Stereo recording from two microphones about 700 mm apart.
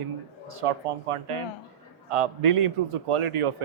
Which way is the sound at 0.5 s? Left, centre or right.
Right.